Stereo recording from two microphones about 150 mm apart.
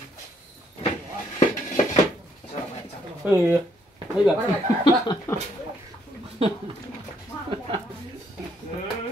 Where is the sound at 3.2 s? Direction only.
15° right (ahead or behind).